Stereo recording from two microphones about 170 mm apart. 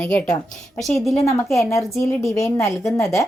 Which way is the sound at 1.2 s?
15° left (ahead or behind).